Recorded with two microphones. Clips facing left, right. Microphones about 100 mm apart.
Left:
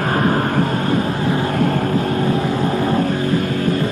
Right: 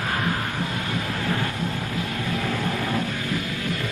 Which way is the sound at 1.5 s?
55° left (ahead or behind).